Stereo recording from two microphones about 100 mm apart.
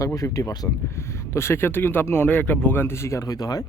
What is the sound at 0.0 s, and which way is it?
Speech, 35° left (ahead or behind).